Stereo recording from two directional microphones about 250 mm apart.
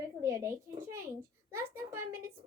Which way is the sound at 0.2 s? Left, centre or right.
Centre.